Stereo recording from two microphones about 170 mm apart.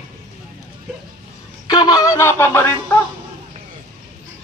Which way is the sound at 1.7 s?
25° left (ahead or behind).